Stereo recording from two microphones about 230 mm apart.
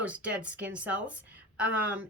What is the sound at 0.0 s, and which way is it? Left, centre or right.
A woman's voice, centre.